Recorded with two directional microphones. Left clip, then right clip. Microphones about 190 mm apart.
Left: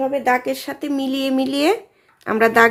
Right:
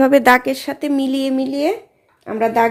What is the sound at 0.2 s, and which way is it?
Speech, 40° right (ahead or behind).